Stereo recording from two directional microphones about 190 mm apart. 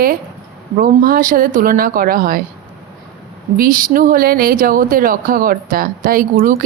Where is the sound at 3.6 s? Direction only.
45° right (ahead or behind).